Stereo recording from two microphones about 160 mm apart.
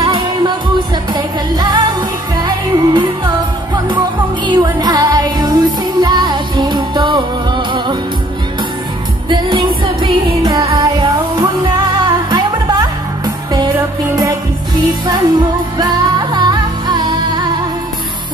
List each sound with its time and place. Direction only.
0.0 s music: 25° right (ahead or behind)
9.3 s music: 25° right (ahead or behind)
10.8 s music: 20° right (ahead or behind)